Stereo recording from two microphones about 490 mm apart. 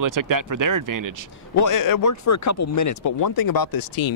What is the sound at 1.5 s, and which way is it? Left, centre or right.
Speech, left.